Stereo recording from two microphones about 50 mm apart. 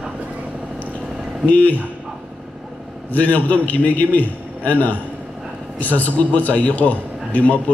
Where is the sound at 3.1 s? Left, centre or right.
Left.